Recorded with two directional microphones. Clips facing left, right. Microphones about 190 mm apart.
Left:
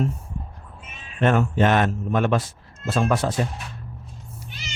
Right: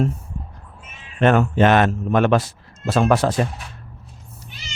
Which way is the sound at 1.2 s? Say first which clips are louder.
Right 4 dB; 80° right.